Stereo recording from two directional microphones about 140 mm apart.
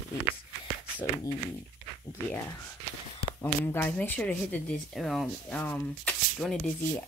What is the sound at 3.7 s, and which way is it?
Speech, 10° left (ahead or behind).